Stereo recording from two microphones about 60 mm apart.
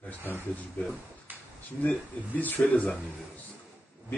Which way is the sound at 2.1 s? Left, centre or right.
Left.